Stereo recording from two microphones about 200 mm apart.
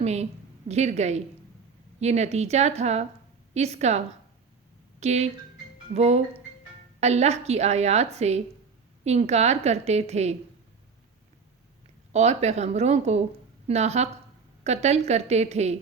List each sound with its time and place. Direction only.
0.0 s a woman's voice: 35° right (ahead or behind)
12.1 s a woman's voice: 35° right (ahead or behind)